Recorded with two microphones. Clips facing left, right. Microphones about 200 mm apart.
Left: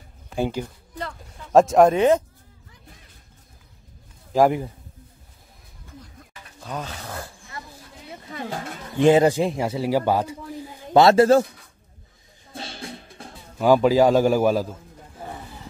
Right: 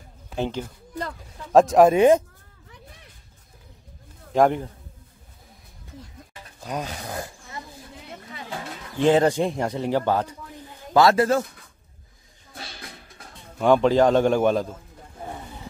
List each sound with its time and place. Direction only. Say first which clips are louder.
0.4 s a man's voice: left 2 dB; 10° left (ahead or behind)
2.0 s speech: right 2 dB; 10° right (ahead or behind)
4.3 s speech: left 1 dB; 5° left (ahead or behind)
6.6 s speech: right 2 dB; 15° right (ahead or behind)
8.3 s a sound: left 7 dB; 45° left (ahead or behind)
9.0 s a man's voice: left 2 dB; 10° left (ahead or behind)
10.9 s a man's voice: left 4 dB; 25° left (ahead or behind)
13.6 s a man's voice: left 1 dB; 5° left (ahead or behind)